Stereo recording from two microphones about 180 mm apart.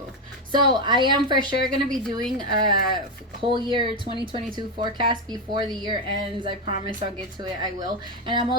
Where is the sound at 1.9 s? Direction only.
5° left (ahead or behind).